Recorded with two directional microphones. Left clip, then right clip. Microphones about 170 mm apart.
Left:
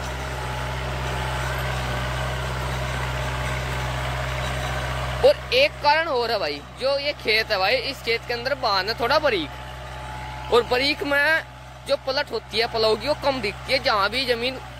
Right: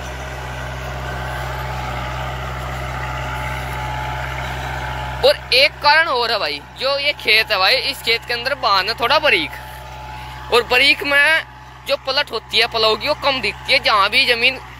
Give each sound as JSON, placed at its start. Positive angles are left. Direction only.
{"t": 0.6, "sound": "vehicle", "side_deg": 20}
{"t": 5.2, "sound": "speech", "side_deg": 20}
{"t": 10.5, "sound": "speech", "side_deg": 10}